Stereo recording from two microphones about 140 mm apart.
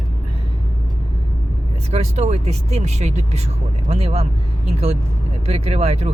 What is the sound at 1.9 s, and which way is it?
Speech, 50° right (ahead or behind).